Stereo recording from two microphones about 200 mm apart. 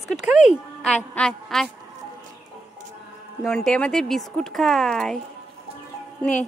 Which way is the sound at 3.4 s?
Centre (ahead or behind).